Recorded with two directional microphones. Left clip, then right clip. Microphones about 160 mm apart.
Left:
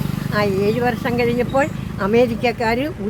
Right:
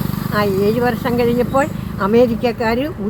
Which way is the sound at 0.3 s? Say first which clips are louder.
Right 2 dB; 10° right (ahead or behind).